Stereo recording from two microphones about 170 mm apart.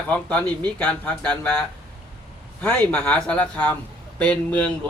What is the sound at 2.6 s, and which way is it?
A man's voice, 10° left (ahead or behind).